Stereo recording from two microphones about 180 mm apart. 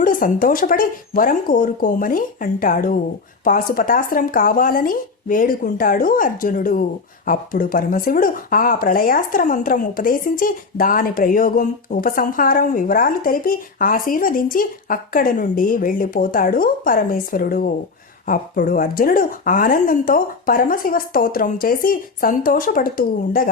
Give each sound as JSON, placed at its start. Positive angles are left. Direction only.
{"t": 0.0, "sound": "speech", "side_deg": 50}